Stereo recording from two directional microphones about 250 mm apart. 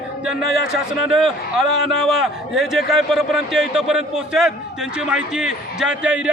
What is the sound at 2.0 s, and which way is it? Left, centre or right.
A man's voice, centre.